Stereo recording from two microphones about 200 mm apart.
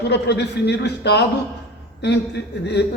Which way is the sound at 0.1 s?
55° left (ahead or behind).